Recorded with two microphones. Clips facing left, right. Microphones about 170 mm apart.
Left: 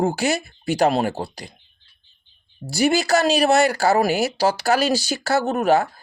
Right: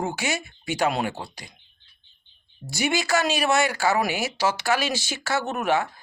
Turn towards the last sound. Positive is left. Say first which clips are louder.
# left 6 dB
turn(degrees=35)  # may be behind; listen again after turning